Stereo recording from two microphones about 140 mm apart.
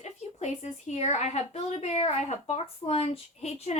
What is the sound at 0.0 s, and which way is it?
A woman's voice, 55° left (ahead or behind).